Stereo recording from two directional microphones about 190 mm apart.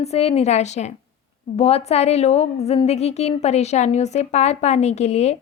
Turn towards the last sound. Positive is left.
turn(degrees=35)  # may be behind; listen again after turning